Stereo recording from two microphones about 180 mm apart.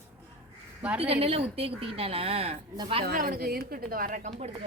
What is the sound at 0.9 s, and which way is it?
A woman's voice, 30° right (ahead or behind).